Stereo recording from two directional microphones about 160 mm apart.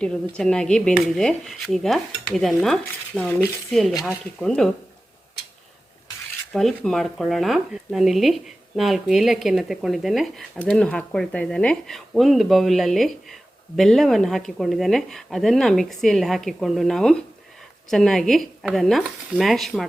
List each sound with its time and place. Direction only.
0.0 s speech: 5° left (ahead or behind)
6.5 s speech: 5° left (ahead or behind)